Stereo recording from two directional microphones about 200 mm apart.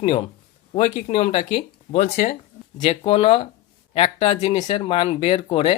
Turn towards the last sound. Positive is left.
turn(degrees=30)  # may be behind; listen again after turning